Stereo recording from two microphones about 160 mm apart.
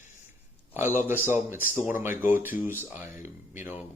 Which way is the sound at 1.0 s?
15° right (ahead or behind).